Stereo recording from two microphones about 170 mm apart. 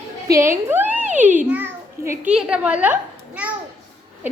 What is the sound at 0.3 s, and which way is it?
A woman's voice, 15° right (ahead or behind).